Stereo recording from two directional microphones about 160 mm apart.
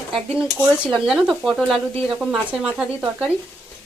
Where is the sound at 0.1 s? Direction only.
5° right (ahead or behind).